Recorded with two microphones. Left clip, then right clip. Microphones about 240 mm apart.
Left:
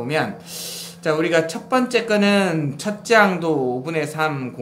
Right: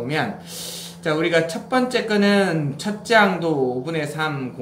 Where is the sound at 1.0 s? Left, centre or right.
Left.